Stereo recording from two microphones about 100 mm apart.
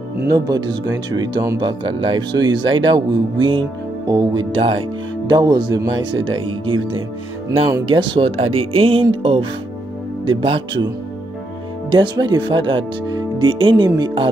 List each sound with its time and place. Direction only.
0.3 s speech: 40° right (ahead or behind)
5.9 s speech: 55° right (ahead or behind)
11.9 s speech: 50° right (ahead or behind)